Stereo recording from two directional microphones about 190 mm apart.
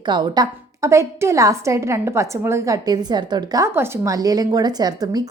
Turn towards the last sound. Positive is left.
turn(degrees=-20)  # may be behind; listen again after turning